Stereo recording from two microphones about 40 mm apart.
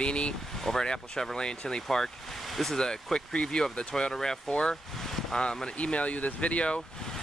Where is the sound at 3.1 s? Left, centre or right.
Left.